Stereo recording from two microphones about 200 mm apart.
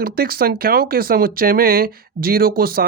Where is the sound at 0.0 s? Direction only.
50° right (ahead or behind).